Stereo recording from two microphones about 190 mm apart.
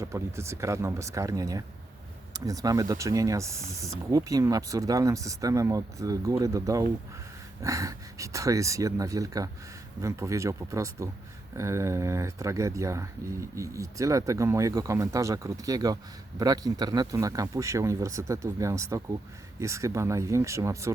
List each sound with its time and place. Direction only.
0.0 s speech: 15° right (ahead or behind)